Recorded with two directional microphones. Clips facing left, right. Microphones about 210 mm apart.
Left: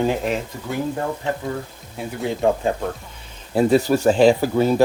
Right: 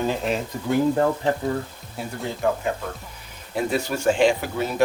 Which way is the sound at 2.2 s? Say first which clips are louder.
Left 5 dB; 15° left (ahead or behind).